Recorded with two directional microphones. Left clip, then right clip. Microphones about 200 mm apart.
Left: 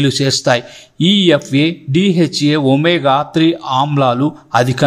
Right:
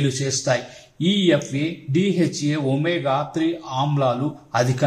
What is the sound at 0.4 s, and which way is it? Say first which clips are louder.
Speech: left 8 dB; 35° left (ahead or behind).